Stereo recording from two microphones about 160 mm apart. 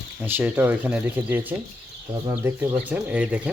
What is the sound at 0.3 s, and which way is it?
Speech, 10° right (ahead or behind).